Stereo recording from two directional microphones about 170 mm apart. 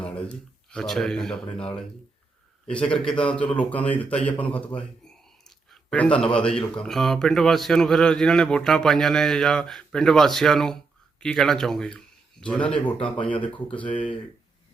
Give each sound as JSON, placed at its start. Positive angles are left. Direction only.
{"t": 0.0, "sound": "a man's voice", "side_deg": 5}
{"t": 13.3, "sound": "speech", "side_deg": 30}